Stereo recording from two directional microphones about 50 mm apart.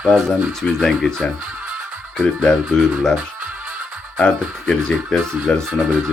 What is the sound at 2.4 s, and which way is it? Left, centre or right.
Speech, centre.